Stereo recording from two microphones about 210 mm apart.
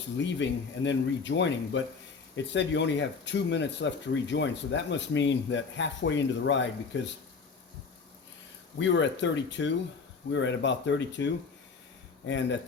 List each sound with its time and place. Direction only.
0.3 s speech: 60° left (ahead or behind)
8.8 s speech: 60° left (ahead or behind)
12.3 s speech: 60° left (ahead or behind)